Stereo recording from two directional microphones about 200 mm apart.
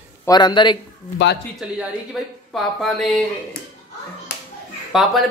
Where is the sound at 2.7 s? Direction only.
Centre (ahead or behind).